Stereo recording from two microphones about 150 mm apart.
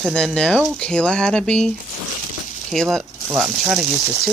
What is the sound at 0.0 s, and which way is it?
Speech, 5° left (ahead or behind).